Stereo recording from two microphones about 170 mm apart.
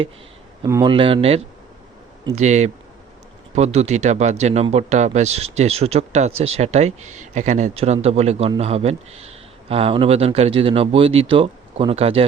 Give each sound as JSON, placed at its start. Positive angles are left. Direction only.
{"t": 0.6, "sound": "speech", "side_deg": -25}